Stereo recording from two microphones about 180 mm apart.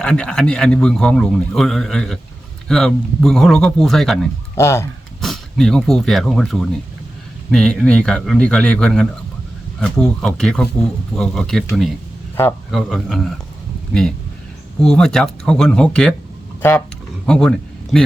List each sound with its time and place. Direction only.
0.0 s a man's voice: 5° left (ahead or behind)
4.5 s speech: 15° left (ahead or behind)
5.2 s a man's voice: centre (ahead or behind)
14.8 s a man's voice: 5° left (ahead or behind)
17.2 s speech: 5° left (ahead or behind)